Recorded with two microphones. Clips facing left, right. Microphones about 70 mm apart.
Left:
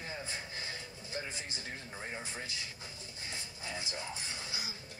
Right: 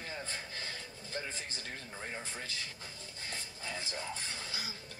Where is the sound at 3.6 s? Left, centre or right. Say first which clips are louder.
Even; centre.